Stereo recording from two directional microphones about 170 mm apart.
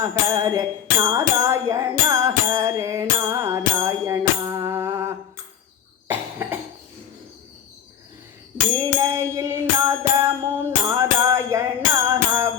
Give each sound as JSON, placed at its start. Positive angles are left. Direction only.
{"t": 0.0, "sound": "music", "side_deg": -15}
{"t": 8.7, "sound": "music", "side_deg": -20}